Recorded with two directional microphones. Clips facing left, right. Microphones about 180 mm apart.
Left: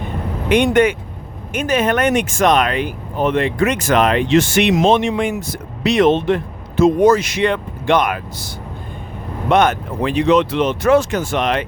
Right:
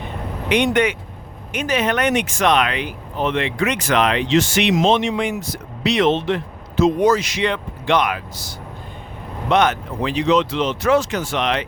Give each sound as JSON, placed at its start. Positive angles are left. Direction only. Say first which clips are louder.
{"t": 0.4, "sound": "speech", "louder": "left 4 dB", "side_deg": 50}